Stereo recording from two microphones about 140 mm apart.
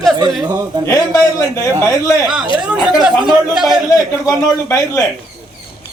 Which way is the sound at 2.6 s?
5° right (ahead or behind).